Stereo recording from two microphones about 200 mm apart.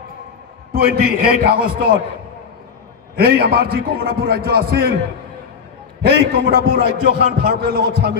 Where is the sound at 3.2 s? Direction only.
50° right (ahead or behind).